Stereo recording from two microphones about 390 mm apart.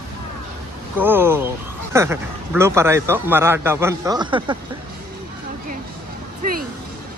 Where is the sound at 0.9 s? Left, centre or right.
Centre.